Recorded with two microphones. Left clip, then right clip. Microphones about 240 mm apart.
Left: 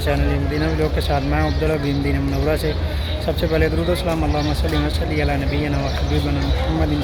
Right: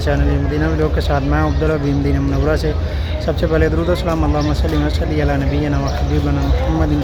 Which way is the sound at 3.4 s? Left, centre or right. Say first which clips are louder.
Right 3 dB; centre.